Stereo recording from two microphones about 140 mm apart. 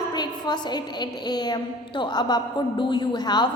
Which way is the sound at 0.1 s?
30° left (ahead or behind).